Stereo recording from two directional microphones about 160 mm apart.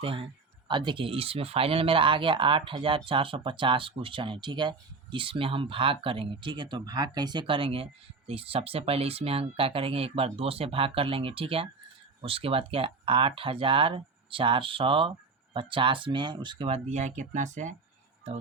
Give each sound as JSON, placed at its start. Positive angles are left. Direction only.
{"t": 0.0, "sound": "speech", "side_deg": -35}